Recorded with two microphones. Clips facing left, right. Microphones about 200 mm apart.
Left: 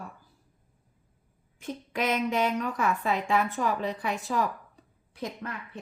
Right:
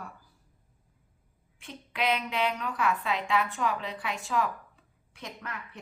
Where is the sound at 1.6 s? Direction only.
40° left (ahead or behind).